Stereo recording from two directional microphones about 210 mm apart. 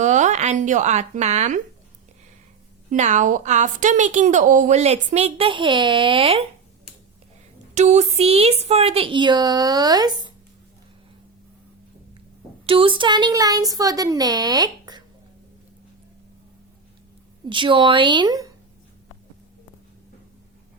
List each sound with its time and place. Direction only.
0.0 s speech: 35° right (ahead or behind)
2.9 s a woman's voice: 35° right (ahead or behind)
7.8 s a woman's voice: 30° right (ahead or behind)
12.6 s a woman's voice: 25° right (ahead or behind)
17.5 s a woman's voice: 25° right (ahead or behind)